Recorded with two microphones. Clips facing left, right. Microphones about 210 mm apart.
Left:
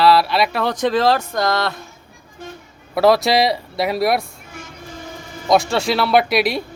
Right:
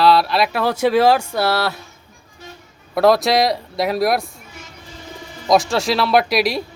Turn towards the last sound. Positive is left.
turn(degrees=0)  # may be behind; listen again after turning